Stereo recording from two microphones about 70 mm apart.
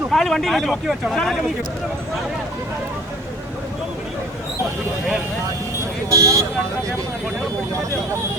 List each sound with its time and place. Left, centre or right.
0.1 s speech: centre
6.1 s speech: right